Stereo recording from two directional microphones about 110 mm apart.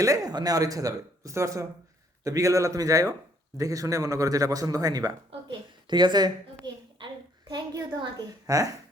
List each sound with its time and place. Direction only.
0.0 s speech: 35° right (ahead or behind)
5.3 s a woman's voice: 50° right (ahead or behind)
7.0 s a sound: 40° right (ahead or behind)
8.4 s speech: 30° right (ahead or behind)